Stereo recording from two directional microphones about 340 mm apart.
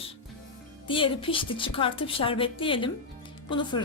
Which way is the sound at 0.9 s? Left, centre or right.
Centre.